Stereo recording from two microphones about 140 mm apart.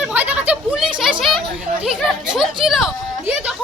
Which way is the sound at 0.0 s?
10° right (ahead or behind).